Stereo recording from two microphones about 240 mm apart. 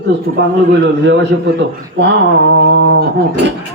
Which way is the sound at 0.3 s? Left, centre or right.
Right.